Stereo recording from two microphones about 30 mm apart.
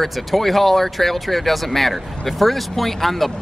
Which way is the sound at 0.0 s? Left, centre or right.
Centre.